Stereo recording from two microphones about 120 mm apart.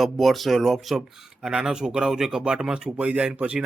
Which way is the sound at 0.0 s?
Centre (ahead or behind).